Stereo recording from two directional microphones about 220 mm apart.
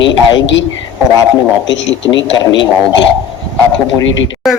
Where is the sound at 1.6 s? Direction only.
55° left (ahead or behind).